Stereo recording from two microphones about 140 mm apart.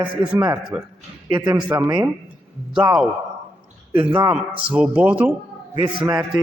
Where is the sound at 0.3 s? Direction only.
25° right (ahead or behind).